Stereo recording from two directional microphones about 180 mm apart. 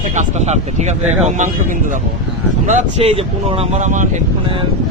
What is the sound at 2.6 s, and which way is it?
Speech, 40° right (ahead or behind).